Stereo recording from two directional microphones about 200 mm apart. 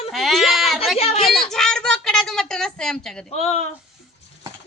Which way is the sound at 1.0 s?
30° left (ahead or behind).